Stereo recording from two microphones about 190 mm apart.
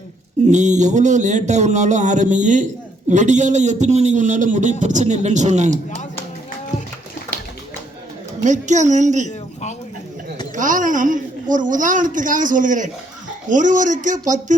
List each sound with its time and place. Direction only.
0.5 s a man's voice: 40° right (ahead or behind)
8.4 s a man's voice: 40° right (ahead or behind)
10.5 s a woman's voice: 40° right (ahead or behind)